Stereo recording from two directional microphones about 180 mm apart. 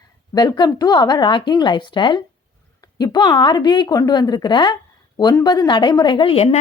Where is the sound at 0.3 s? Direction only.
25° left (ahead or behind).